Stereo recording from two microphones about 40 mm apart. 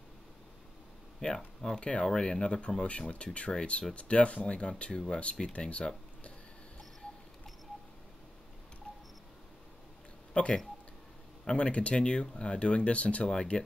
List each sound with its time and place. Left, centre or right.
1.2 s speech: centre
2.0 s speech: centre
8.9 s camera: left
10.4 s speech: left
13.3 s speech: left